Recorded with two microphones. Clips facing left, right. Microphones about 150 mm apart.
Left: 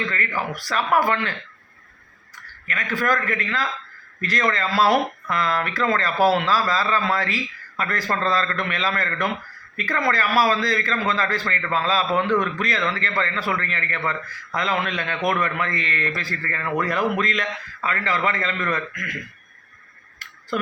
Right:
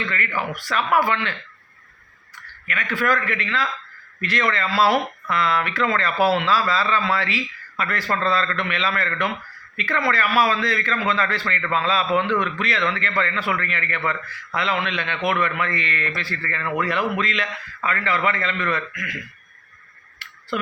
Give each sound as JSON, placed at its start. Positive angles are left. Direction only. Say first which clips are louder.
{"t": 0.0, "sound": "a man's voice", "louder": "even", "side_deg": 35}